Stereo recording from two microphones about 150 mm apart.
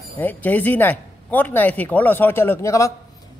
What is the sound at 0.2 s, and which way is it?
Speech, 10° left (ahead or behind).